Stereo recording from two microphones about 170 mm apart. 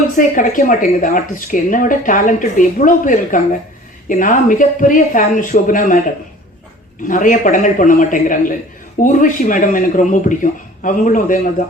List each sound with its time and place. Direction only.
0.2 s speech: 50° left (ahead or behind)
7.1 s speech: 50° left (ahead or behind)